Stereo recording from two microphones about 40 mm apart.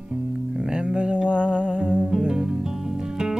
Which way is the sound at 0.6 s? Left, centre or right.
Right.